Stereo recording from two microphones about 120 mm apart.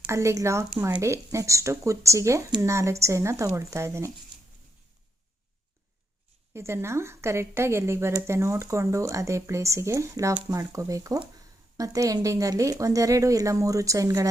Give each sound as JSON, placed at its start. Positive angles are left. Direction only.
{"t": 0.1, "sound": "a woman's voice", "side_deg": -25}
{"t": 6.5, "sound": "a woman's voice", "side_deg": -20}